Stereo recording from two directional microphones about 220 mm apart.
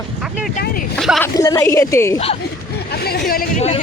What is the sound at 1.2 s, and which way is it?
Speech, 15° left (ahead or behind).